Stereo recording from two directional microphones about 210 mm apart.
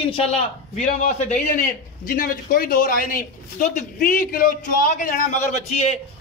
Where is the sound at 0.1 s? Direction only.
30° left (ahead or behind).